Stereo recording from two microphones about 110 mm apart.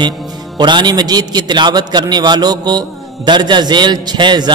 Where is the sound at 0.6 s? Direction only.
40° right (ahead or behind).